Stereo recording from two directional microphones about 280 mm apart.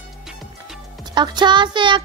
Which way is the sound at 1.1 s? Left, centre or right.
Centre.